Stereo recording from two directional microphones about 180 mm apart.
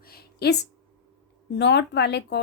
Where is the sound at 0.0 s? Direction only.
60° left (ahead or behind).